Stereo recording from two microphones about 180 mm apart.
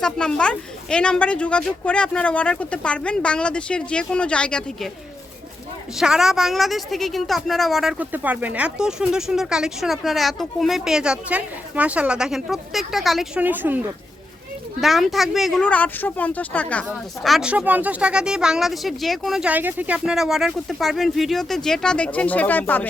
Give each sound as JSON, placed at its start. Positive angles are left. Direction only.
{"t": 0.0, "sound": "a woman's voice", "side_deg": 5}
{"t": 6.0, "sound": "a woman's voice", "side_deg": -5}
{"t": 14.8, "sound": "speech", "side_deg": 0}
{"t": 16.9, "sound": "a woman's voice", "side_deg": 0}